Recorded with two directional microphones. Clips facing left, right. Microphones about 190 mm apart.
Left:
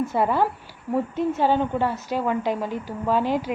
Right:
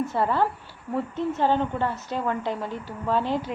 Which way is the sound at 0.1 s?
15° left (ahead or behind).